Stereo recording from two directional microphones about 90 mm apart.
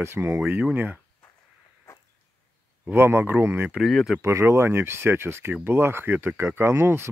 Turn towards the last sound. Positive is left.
turn(degrees=-25)  # may be behind; listen again after turning